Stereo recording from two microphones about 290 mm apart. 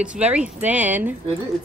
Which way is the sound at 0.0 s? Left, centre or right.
Centre.